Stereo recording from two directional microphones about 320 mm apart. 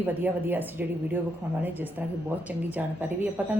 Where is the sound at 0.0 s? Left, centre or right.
Centre.